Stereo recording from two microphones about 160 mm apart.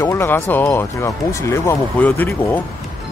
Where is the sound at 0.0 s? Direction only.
15° left (ahead or behind).